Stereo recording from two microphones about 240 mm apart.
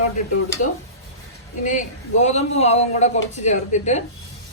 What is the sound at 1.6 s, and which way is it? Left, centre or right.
A man's voice, left.